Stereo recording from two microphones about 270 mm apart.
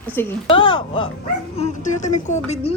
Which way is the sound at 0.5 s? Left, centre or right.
Centre.